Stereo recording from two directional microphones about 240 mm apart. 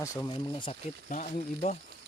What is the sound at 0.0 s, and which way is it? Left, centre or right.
Speech, centre.